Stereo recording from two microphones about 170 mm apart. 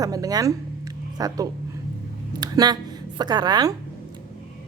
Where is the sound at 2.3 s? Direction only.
25° right (ahead or behind).